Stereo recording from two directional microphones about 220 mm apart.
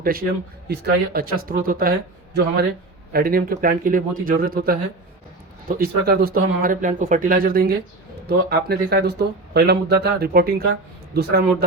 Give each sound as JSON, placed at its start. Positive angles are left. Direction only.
{"t": 0.0, "sound": "speech", "side_deg": -40}
{"t": 3.1, "sound": "speech", "side_deg": -45}